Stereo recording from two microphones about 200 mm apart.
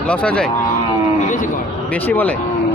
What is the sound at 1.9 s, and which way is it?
Speech, 10° left (ahead or behind).